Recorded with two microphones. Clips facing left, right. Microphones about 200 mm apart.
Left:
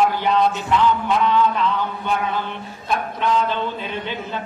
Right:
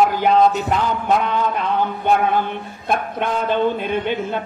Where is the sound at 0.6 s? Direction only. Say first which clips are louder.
Even; 45° right (ahead or behind).